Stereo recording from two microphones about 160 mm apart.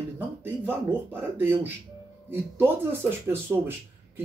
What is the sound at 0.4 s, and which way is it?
Speech, 10° right (ahead or behind).